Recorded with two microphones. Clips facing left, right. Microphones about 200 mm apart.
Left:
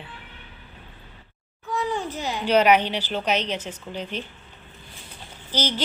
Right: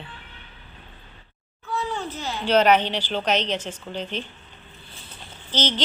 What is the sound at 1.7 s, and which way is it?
Speech, 15° left (ahead or behind).